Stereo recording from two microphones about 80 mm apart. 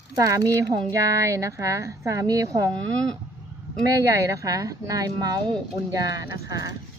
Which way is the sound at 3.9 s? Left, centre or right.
Right.